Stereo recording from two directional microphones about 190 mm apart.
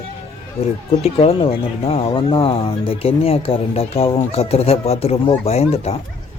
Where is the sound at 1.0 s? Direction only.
30° left (ahead or behind).